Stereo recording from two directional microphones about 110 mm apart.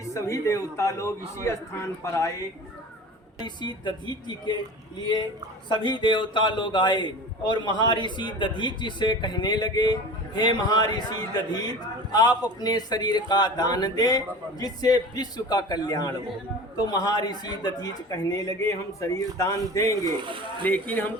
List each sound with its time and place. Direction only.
0.0 s a man's voice: 30° left (ahead or behind)
3.3 s a man's voice: 40° left (ahead or behind)
5.6 s a man's voice: 45° left (ahead or behind); by 20.0 s 30° left (ahead or behind)
20.1 s speech: 50° right (ahead or behind)
20.6 s speech: 15° left (ahead or behind)